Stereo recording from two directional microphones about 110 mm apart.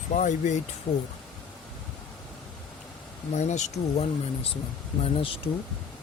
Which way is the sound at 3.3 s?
90° left.